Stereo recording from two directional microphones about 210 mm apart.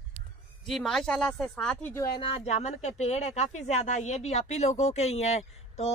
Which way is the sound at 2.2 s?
30° left (ahead or behind).